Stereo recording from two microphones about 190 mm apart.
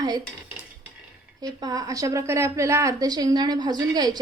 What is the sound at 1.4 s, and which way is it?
A woman's voice, 20° right (ahead or behind).